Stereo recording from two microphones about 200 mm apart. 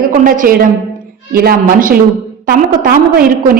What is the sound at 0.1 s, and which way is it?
A woman's voice, 40° right (ahead or behind).